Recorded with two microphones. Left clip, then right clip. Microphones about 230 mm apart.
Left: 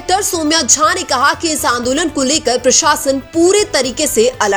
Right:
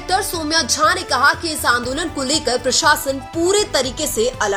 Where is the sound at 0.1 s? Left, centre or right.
Left.